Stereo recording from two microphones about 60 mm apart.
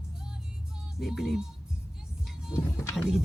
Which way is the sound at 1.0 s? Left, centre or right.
Centre.